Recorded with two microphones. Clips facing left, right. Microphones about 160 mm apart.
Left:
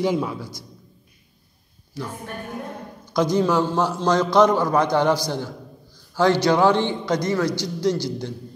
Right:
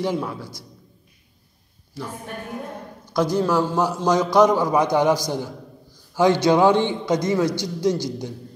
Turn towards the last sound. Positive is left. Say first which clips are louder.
# even
turn(degrees=-20)  # may be behind; listen again after turning